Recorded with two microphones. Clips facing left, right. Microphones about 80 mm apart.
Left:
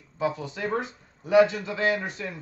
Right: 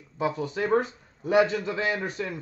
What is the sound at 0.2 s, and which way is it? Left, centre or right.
A man's voice, right.